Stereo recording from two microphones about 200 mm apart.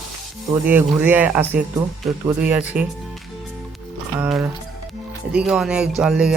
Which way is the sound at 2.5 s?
10° right (ahead or behind).